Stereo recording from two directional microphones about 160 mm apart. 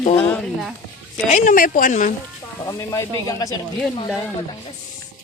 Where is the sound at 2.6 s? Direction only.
20° left (ahead or behind).